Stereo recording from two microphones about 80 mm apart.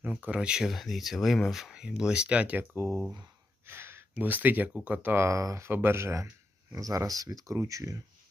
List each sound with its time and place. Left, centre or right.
0.0 s speech: centre
0.3 s speech: centre
2.7 s speech: right; by 5.1 s centre
5.1 s speech: right
5.6 s speech: right
6.7 s speech: right